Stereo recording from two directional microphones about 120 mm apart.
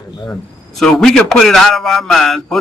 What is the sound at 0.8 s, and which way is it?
Speech, 5° left (ahead or behind).